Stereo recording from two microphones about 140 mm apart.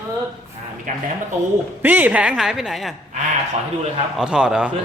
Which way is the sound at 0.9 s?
70° right (ahead or behind).